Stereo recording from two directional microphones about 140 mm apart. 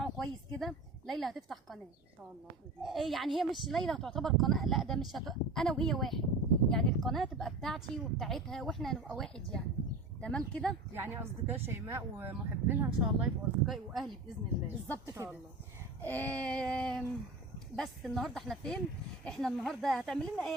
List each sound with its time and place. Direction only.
0.0 s a sound: 5° left (ahead or behind)
2.8 s speech: centre (ahead or behind)
10.9 s a woman's voice: 15° right (ahead or behind); by 14.1 s centre (ahead or behind)
15.0 s a woman's voice: 15° right (ahead or behind)
16.0 s a sound: 10° left (ahead or behind)
17.7 s speech: centre (ahead or behind)